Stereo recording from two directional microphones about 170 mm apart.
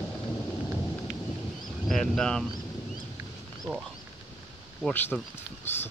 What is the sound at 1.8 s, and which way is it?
Speech, centre (ahead or behind).